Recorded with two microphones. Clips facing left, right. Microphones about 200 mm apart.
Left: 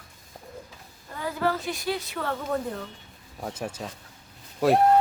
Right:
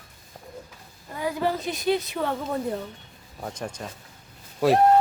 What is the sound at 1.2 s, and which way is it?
A woman's voice, 15° right (ahead or behind).